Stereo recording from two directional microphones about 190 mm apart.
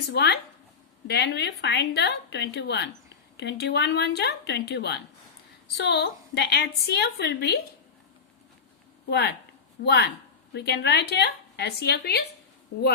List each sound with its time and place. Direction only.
0.1 s a woman's voice: 60° left (ahead or behind)
9.0 s a woman's voice: 60° left (ahead or behind)